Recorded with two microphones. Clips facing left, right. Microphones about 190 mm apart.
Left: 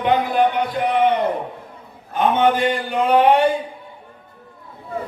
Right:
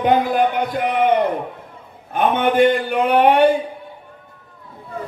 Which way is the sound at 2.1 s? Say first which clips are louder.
Left 1 dB; 55° right (ahead or behind).